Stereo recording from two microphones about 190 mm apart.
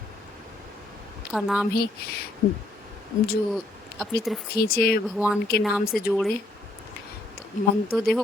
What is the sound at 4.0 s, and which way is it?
Speech, centre (ahead or behind).